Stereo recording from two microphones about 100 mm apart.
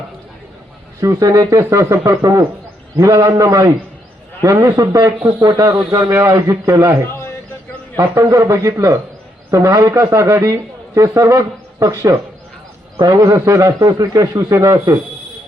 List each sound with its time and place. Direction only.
1.0 s a man's voice: 35° right (ahead or behind)
7.9 s a man's voice: 30° right (ahead or behind)